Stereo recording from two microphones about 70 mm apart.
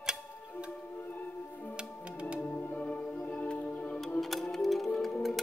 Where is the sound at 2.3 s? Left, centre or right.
Centre.